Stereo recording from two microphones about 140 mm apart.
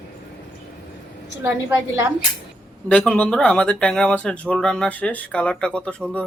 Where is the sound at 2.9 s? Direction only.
10° left (ahead or behind).